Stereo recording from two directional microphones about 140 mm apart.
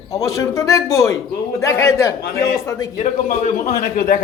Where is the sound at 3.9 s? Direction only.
90° left.